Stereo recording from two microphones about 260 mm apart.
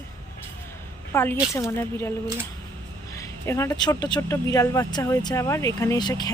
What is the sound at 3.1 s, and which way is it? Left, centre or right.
Speech, centre.